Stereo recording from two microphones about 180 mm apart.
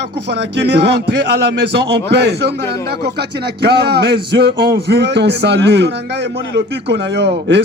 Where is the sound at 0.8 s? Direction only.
70° right (ahead or behind).